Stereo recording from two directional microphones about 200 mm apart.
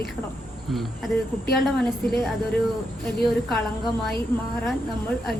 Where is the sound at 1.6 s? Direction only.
Centre (ahead or behind).